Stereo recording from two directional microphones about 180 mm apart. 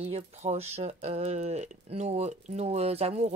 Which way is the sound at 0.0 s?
35° right (ahead or behind).